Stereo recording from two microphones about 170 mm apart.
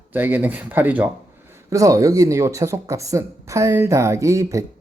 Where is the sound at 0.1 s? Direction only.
10° right (ahead or behind).